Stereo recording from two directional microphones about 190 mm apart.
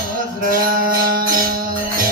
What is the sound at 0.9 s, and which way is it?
Music, 50° right (ahead or behind).